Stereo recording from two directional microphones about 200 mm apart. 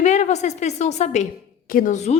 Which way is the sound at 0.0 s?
35° left (ahead or behind).